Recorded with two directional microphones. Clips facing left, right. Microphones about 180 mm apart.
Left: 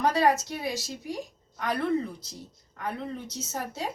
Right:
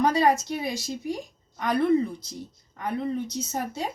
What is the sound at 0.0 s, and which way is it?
Speech, 15° right (ahead or behind).